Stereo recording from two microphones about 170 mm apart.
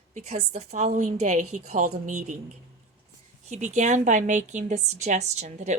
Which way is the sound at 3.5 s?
45° right (ahead or behind).